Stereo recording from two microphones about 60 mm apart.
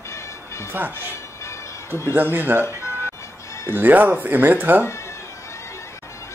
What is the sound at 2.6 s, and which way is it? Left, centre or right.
Music, left.